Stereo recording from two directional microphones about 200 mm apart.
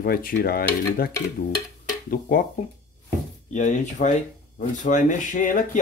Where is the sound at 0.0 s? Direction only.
45° left (ahead or behind).